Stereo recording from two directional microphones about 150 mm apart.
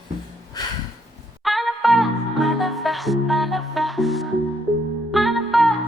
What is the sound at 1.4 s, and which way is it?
Music, centre (ahead or behind).